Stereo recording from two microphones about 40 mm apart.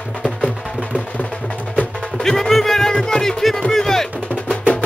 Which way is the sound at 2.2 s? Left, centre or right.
Centre.